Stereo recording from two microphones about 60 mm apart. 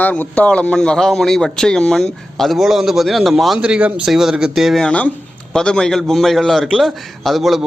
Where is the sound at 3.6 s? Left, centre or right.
Centre.